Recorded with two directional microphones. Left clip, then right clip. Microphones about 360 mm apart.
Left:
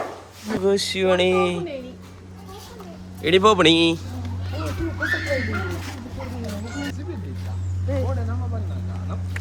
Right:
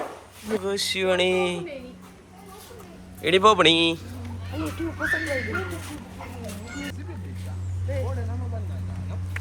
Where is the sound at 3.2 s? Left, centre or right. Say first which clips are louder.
Left 2 dB; centre.